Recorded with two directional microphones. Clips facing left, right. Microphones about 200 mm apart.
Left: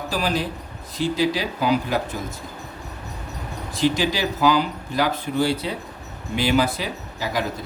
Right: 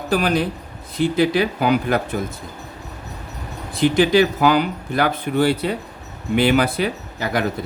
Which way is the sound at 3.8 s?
55° right (ahead or behind).